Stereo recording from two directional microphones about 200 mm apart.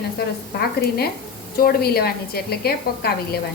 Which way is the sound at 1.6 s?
50° left (ahead or behind).